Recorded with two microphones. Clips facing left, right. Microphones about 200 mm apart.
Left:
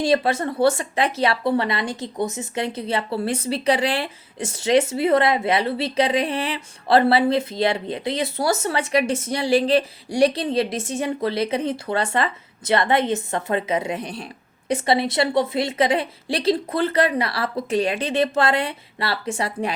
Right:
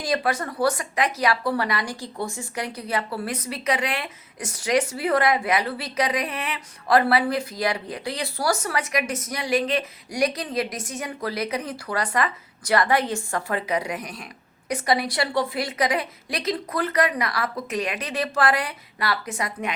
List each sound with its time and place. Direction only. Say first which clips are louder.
0.0 s speech: left 5 dB; 25° left (ahead or behind)